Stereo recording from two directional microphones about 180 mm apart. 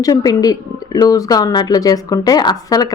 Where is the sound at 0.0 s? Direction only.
20° left (ahead or behind).